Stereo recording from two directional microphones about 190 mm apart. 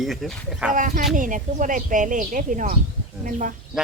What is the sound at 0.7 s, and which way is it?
Speech, 45° right (ahead or behind).